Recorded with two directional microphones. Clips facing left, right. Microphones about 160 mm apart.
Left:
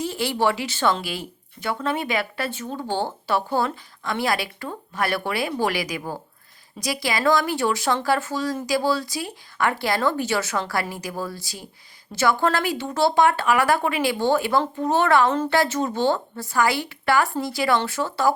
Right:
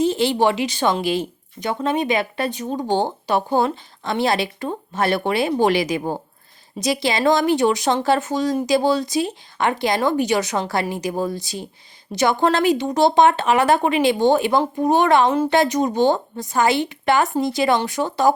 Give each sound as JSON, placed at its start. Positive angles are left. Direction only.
{"t": 0.0, "sound": "speech", "side_deg": -20}